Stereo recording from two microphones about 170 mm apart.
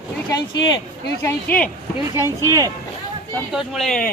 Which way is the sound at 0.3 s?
25° left (ahead or behind).